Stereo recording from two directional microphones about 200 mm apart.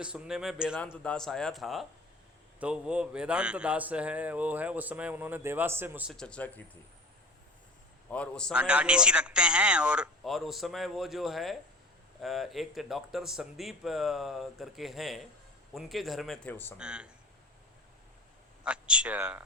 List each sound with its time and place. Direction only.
0.0 s a man's voice: 5° right (ahead or behind)
6.1 s speech: 5° left (ahead or behind)
8.1 s speech: 5° left (ahead or behind)
8.5 s speech: 5° right (ahead or behind); by 16.7 s 10° left (ahead or behind)
16.7 s speech: 5° right (ahead or behind)
18.6 s speech: 5° right (ahead or behind)